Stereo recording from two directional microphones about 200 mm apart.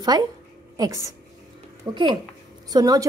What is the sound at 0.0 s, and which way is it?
A woman's voice, 20° right (ahead or behind).